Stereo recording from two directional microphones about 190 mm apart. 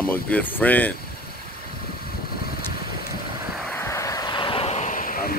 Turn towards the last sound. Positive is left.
turn(degrees=45)  # may be behind; listen again after turning